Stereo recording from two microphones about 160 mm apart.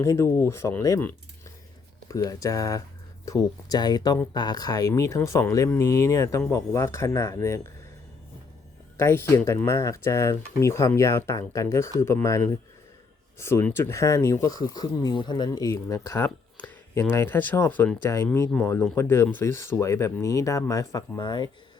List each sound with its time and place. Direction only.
0.0 s speech: 15° left (ahead or behind)
9.0 s speech: 15° left (ahead or behind)
13.4 s speech: 15° left (ahead or behind)